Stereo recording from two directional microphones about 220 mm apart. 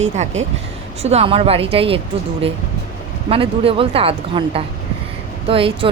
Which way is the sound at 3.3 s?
25° right (ahead or behind).